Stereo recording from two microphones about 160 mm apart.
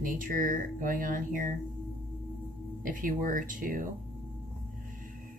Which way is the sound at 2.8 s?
60° right (ahead or behind).